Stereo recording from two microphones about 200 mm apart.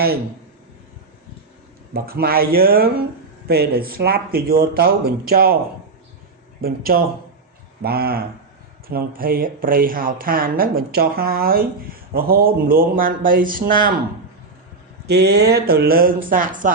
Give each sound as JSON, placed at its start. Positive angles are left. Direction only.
{"t": 1.9, "sound": "speech", "side_deg": -50}
{"t": 6.6, "sound": "speech", "side_deg": -50}
{"t": 15.0, "sound": "speech", "side_deg": -55}